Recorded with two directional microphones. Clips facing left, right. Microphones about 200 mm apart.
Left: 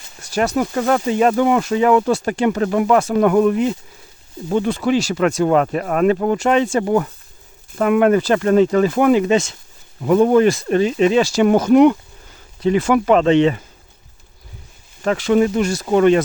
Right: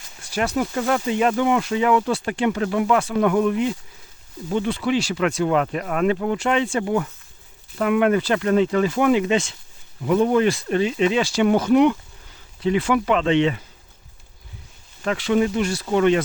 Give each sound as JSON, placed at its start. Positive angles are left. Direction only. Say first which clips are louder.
{"t": 0.2, "sound": "speech", "louder": "left 4 dB", "side_deg": 40}
{"t": 15.0, "sound": "speech", "louder": "left 4 dB", "side_deg": 45}